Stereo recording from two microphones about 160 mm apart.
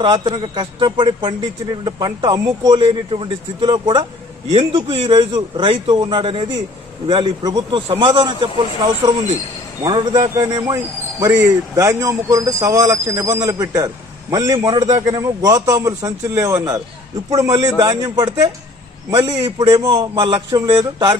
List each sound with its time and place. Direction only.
0.0 s a man's voice: 30° right (ahead or behind)
9.8 s a man's voice: 25° right (ahead or behind)